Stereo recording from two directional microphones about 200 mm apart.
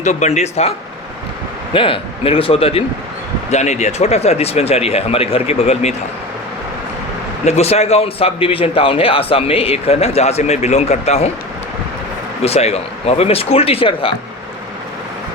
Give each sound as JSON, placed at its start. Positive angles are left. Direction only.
{"t": 0.0, "sound": "a man's voice", "side_deg": 35}
{"t": 1.7, "sound": "a man's voice", "side_deg": 25}
{"t": 7.4, "sound": "a man's voice", "side_deg": 30}
{"t": 12.4, "sound": "speech", "side_deg": 30}